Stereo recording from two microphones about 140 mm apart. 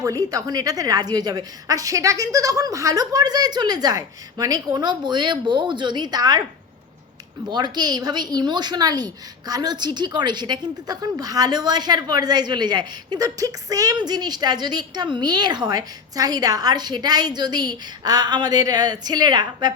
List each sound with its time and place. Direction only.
0.0 s a woman's voice: 25° right (ahead or behind)
7.4 s a woman's voice: 30° right (ahead or behind)